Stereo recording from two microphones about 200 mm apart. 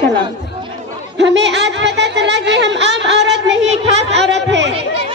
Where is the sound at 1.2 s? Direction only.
60° right (ahead or behind).